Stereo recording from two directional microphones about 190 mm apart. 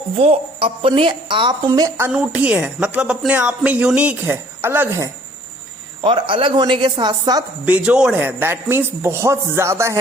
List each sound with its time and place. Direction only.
0.2 s a woman's voice: 30° right (ahead or behind)
2.0 s speech: 5° right (ahead or behind)
6.0 s a woman's voice: 25° right (ahead or behind)
7.6 s speech: 5° right (ahead or behind)